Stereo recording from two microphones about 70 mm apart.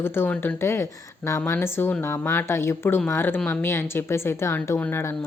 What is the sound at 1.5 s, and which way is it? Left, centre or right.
A woman's voice, left.